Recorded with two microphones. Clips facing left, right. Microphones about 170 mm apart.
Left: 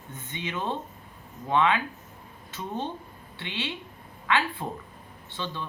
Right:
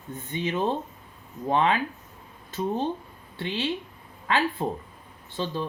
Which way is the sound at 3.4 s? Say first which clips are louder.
Right 6 dB; 40° right (ahead or behind).